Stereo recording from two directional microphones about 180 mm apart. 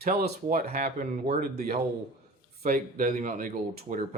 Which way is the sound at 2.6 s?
45° right (ahead or behind).